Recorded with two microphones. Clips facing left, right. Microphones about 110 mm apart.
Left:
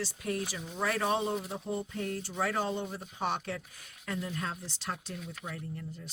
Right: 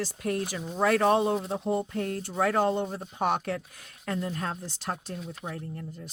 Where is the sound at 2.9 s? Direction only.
35° right (ahead or behind).